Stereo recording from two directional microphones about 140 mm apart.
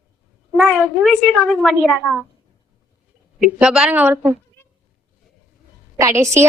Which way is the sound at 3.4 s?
5° right (ahead or behind).